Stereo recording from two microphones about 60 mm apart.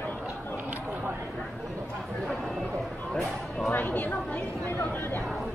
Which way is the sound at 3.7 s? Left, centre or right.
Left.